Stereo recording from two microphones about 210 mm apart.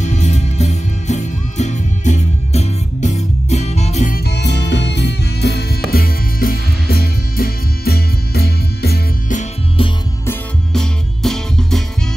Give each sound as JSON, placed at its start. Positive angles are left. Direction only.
{"t": 0.0, "sound": "music", "side_deg": 35}
{"t": 9.4, "sound": "music", "side_deg": 25}
{"t": 10.2, "sound": "music", "side_deg": 5}